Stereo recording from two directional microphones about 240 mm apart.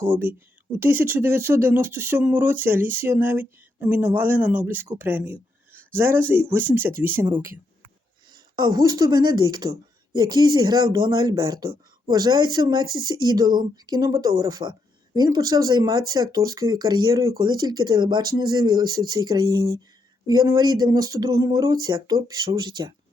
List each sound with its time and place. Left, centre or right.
0.0 s speech: centre
8.5 s speech: centre